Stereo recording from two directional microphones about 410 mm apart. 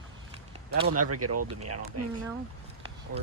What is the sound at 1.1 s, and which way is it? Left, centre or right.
Speech, right.